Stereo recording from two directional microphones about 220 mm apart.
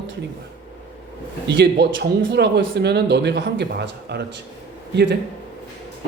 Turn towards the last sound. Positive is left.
turn(degrees=-50)  # may be behind; listen again after turning